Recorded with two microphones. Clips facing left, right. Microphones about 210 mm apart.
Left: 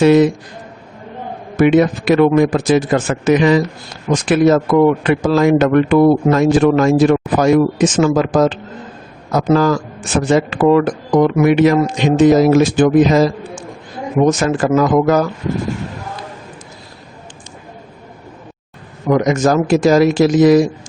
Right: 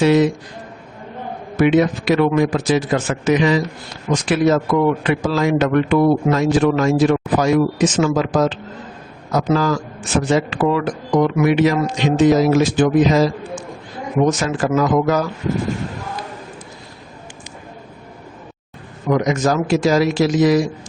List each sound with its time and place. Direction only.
0.0 s a man's voice: 50° left (ahead or behind)
1.5 s a man's voice: 50° left (ahead or behind)
19.1 s a man's voice: 50° left (ahead or behind)